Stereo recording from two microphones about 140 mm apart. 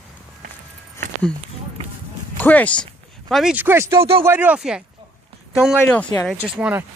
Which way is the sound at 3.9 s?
40° right (ahead or behind).